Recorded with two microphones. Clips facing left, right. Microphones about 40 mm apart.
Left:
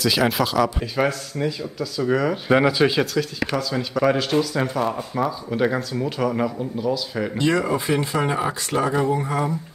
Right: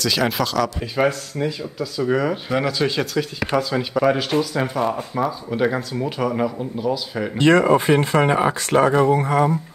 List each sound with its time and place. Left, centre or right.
0.0 s speech: centre
0.9 s speech: centre
2.6 s speech: centre
3.5 s speech: centre
7.3 s speech: right
8.7 s speech: right
9.1 s speech: right